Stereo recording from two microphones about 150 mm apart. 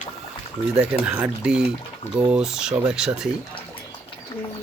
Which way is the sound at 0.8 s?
10° right (ahead or behind).